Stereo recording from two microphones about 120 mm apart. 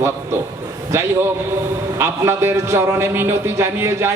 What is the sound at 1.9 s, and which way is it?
A man's voice, 20° right (ahead or behind).